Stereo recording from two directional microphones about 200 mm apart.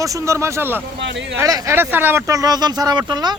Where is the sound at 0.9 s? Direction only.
60° right (ahead or behind).